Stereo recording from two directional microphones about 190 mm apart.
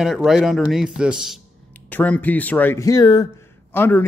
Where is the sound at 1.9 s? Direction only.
10° left (ahead or behind).